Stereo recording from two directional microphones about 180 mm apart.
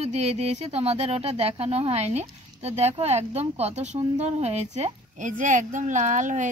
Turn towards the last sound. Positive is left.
turn(degrees=-45)  # may be behind; listen again after turning